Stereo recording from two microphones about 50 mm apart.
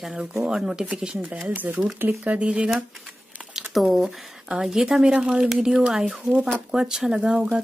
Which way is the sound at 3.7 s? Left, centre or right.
Centre.